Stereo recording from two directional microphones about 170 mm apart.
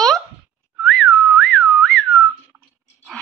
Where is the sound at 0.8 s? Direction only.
Centre (ahead or behind).